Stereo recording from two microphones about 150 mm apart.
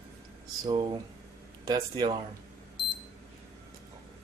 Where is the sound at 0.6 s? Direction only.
30° right (ahead or behind).